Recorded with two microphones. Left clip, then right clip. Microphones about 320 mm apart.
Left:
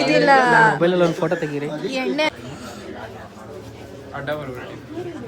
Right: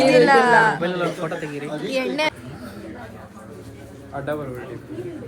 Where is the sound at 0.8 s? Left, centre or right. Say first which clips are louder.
Left 6 dB; left.